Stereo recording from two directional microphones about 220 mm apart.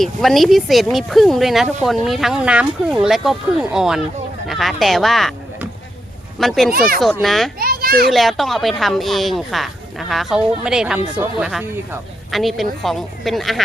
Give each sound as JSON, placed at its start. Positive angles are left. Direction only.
{"t": 0.0, "sound": "speech", "side_deg": 0}
{"t": 7.6, "sound": "children playing", "side_deg": -40}
{"t": 8.1, "sound": "speech", "side_deg": 0}